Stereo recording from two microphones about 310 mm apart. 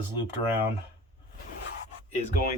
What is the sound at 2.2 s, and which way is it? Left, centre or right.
Speech, left.